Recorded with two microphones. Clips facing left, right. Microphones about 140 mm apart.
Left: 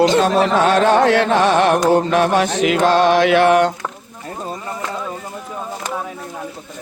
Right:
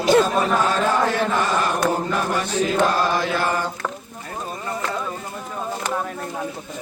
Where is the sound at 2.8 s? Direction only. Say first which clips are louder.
Left 7 dB; 80° left.